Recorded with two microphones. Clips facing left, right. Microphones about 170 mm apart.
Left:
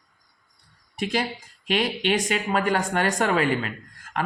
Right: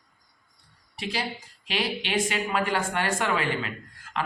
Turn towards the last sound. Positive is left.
turn(degrees=45)  # may be behind; listen again after turning